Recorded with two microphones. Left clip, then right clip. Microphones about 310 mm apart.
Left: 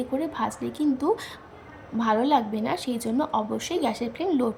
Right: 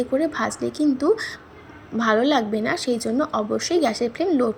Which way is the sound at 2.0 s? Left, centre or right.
Centre.